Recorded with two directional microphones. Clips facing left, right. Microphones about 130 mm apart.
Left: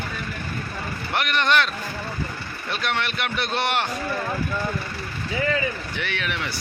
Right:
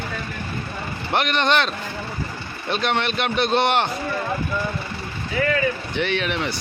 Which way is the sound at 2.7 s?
25° right (ahead or behind).